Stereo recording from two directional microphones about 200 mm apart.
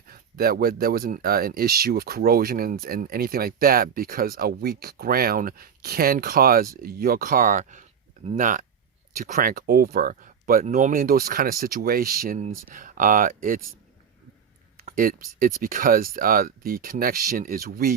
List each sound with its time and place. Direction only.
0.1 s speech: 50° right (ahead or behind)
14.9 s speech: 45° right (ahead or behind)